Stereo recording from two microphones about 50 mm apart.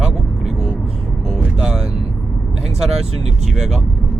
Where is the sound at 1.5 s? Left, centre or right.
Centre.